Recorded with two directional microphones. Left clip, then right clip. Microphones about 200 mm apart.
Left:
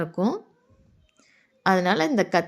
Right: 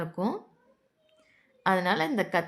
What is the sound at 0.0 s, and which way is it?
A woman's voice, 15° left (ahead or behind).